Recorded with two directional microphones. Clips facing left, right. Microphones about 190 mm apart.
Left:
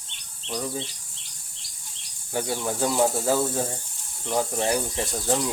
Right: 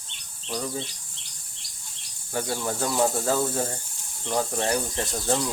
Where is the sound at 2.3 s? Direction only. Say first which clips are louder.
Left 1 dB; 15° left (ahead or behind).